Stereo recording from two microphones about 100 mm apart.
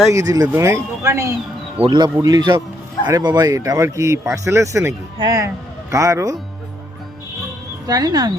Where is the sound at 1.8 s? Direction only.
50° right (ahead or behind).